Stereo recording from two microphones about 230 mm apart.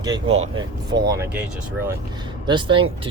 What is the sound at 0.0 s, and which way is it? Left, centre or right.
Speech, centre.